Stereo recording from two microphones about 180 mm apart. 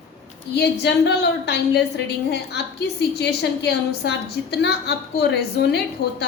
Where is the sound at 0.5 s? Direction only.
70° left (ahead or behind).